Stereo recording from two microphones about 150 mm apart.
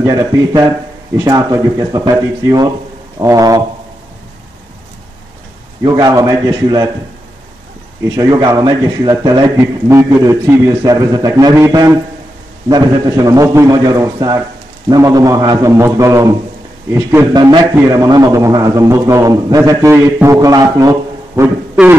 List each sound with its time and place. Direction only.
0.0 s a man's voice: 20° right (ahead or behind)
5.9 s a man's voice: 25° right (ahead or behind)
8.2 s a man's voice: 25° right (ahead or behind)
17.3 s a man's voice: 30° right (ahead or behind)
21.8 s a sound: 5° right (ahead or behind)